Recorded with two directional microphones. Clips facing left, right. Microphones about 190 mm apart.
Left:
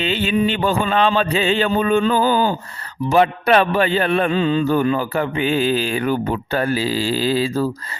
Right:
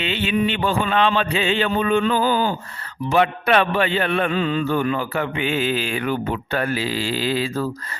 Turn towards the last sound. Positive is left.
turn(degrees=35)  # may be behind; listen again after turning